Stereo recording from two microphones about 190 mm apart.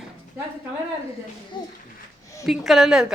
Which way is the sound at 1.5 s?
25° left (ahead or behind).